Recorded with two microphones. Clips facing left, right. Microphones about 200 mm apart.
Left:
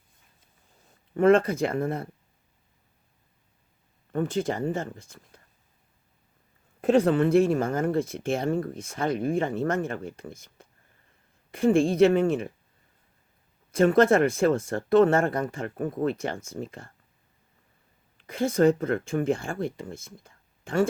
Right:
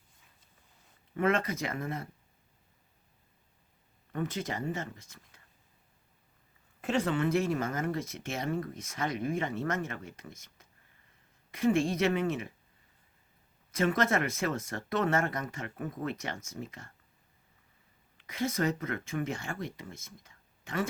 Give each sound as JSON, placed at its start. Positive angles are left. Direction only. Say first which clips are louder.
{"t": 1.2, "sound": "speech", "louder": "left 10 dB", "side_deg": 30}
{"t": 4.1, "sound": "speech", "louder": "left 8 dB", "side_deg": 30}
{"t": 6.8, "sound": "speech", "louder": "left 10 dB", "side_deg": 50}
{"t": 7.1, "sound": "speech", "louder": "left 8 dB", "side_deg": 35}
{"t": 13.7, "sound": "speech", "louder": "left 9 dB", "side_deg": 30}
{"t": 15.9, "sound": "speech", "louder": "left 9 dB", "side_deg": 30}
{"t": 18.2, "sound": "speech", "louder": "left 9 dB", "side_deg": 30}